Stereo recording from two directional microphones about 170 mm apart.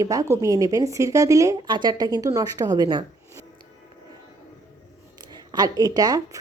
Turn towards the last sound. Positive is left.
turn(degrees=-20)  # may be behind; listen again after turning